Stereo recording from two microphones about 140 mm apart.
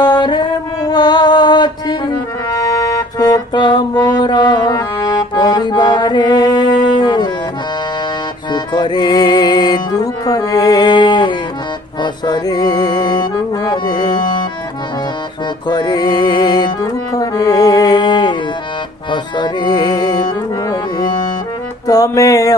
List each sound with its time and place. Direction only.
0.0 s a sound: 30° left (ahead or behind)
2.5 s music: 25° left (ahead or behind)
8.5 s music: 30° left (ahead or behind)
15.7 s music: 30° left (ahead or behind)